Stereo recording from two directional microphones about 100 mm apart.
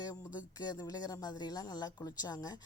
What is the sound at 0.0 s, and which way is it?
Speech, 40° left (ahead or behind).